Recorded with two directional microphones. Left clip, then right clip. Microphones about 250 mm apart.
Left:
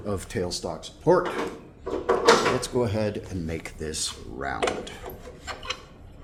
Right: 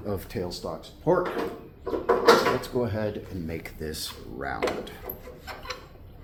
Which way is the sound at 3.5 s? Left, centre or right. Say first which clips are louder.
Left 1 dB; centre.